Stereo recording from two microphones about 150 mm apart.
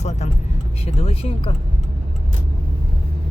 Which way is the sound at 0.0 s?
50° left (ahead or behind).